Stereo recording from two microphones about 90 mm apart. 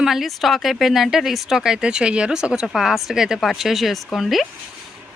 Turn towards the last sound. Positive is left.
turn(degrees=0)  # may be behind; listen again after turning